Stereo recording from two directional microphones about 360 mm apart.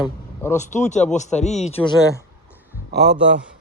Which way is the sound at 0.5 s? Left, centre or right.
Centre.